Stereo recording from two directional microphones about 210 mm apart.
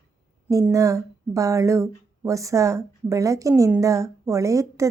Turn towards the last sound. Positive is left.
turn(degrees=-15)  # may be behind; listen again after turning